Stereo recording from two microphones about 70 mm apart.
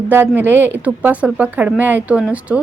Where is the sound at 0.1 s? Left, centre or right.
Right.